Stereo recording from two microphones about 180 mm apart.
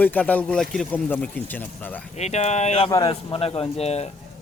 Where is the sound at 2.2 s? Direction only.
40° left (ahead or behind).